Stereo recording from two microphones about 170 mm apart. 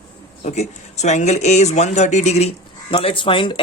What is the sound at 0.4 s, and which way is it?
Speech, 40° left (ahead or behind).